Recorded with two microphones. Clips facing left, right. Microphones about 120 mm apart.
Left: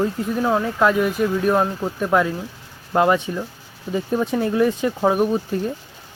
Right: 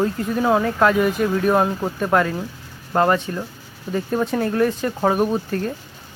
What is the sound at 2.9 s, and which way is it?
Speech, 10° left (ahead or behind).